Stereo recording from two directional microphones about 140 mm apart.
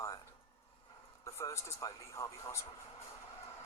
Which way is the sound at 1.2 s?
20° left (ahead or behind).